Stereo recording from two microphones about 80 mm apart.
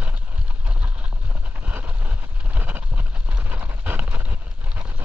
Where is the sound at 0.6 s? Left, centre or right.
Centre.